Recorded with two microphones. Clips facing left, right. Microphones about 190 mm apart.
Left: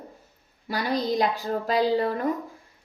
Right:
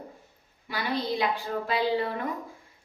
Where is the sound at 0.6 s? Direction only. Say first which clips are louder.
Left 4 dB; 40° left (ahead or behind).